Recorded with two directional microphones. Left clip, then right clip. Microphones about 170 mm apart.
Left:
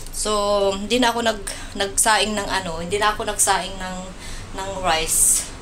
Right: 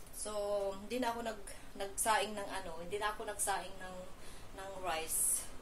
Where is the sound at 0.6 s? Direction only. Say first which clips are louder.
Left 19 dB; 10° left (ahead or behind).